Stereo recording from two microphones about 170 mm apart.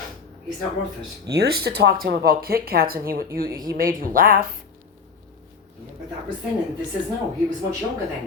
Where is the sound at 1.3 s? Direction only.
70° right (ahead or behind).